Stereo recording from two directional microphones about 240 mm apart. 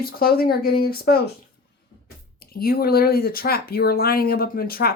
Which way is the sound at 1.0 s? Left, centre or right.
Left.